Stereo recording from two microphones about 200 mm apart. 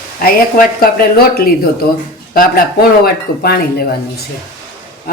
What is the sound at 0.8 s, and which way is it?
Speech, 50° left (ahead or behind).